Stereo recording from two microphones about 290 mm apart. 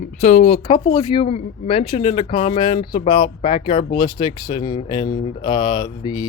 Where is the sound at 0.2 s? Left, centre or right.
Left.